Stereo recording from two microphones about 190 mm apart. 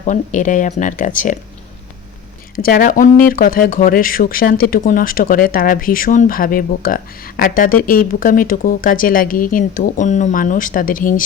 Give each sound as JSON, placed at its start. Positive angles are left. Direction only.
{"t": 0.0, "sound": "speech", "side_deg": 40}
{"t": 2.6, "sound": "speech", "side_deg": 50}